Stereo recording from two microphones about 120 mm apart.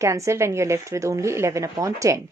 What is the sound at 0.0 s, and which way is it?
Speech, 25° right (ahead or behind).